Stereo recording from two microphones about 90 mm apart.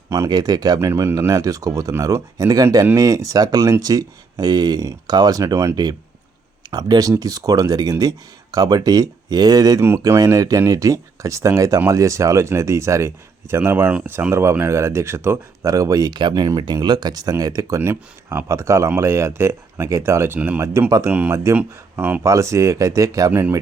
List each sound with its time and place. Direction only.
0.3 s speech: 50° right (ahead or behind)
0.8 s speech: 30° right (ahead or behind)
1.3 s speech: 40° right (ahead or behind)
5.7 s speech: 50° right (ahead or behind); by 15.4 s 25° right (ahead or behind)
15.6 s speech: 40° right (ahead or behind)
16.8 s speech: 55° right (ahead or behind)
17.7 s speech: 25° right (ahead or behind)
22.2 s speech: 35° right (ahead or behind)
23.3 s speech: 25° right (ahead or behind)